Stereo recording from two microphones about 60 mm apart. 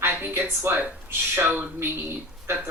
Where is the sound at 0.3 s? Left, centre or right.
Right.